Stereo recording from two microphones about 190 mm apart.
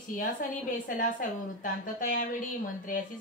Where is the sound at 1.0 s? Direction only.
45° left (ahead or behind).